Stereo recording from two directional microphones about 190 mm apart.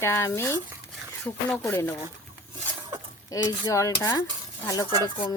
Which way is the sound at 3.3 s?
15° left (ahead or behind).